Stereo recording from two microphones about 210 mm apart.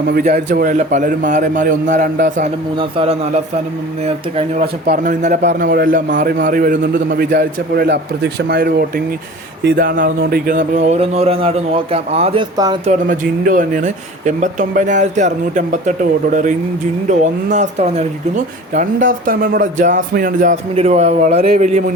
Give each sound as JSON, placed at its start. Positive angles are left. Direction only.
{"t": 0.3, "sound": "speech", "side_deg": -40}
{"t": 2.7, "sound": "speech", "side_deg": -30}
{"t": 4.6, "sound": "a man's voice", "side_deg": -45}
{"t": 12.8, "sound": "speech", "side_deg": -35}